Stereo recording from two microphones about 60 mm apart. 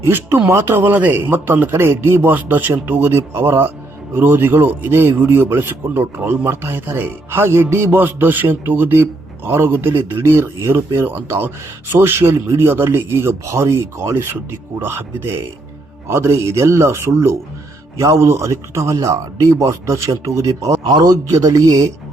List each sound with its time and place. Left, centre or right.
0.0 s a man's voice: right